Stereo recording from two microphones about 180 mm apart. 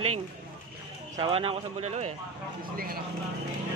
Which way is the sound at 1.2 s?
30° right (ahead or behind).